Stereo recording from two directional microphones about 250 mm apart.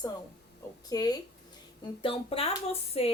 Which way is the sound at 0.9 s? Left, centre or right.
Centre.